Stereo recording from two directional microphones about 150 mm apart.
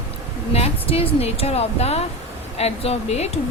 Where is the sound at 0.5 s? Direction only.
40° left (ahead or behind).